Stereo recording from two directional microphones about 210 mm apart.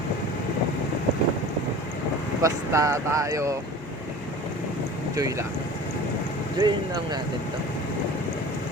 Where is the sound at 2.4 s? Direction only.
15° right (ahead or behind).